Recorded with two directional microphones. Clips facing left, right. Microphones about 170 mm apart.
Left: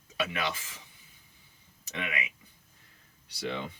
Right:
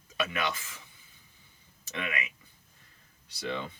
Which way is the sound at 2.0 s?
15° left (ahead or behind).